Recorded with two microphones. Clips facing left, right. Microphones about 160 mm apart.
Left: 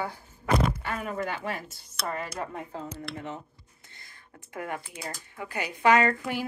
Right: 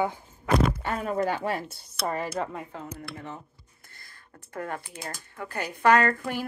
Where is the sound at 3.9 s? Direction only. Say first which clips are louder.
Even; 20° left (ahead or behind).